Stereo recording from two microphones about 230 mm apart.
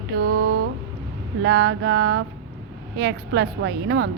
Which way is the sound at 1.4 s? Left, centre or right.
Right.